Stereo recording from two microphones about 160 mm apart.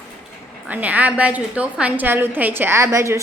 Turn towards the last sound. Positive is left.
turn(degrees=-20)  # may be behind; listen again after turning